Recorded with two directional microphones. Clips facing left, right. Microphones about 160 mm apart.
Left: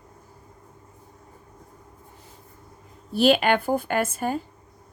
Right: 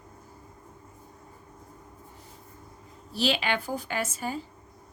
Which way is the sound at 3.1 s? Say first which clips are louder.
Left 8 dB; 55° left (ahead or behind).